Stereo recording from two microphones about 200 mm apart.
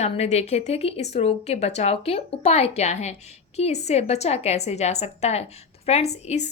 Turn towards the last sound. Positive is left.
turn(degrees=35)  # may be behind; listen again after turning